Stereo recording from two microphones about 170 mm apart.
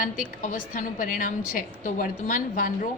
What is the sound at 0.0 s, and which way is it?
A woman's voice, 50° left (ahead or behind).